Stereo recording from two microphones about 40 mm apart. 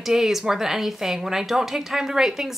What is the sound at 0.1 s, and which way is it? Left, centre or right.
A woman's voice, centre.